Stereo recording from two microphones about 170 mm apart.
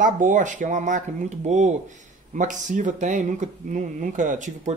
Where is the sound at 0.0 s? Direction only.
50° right (ahead or behind).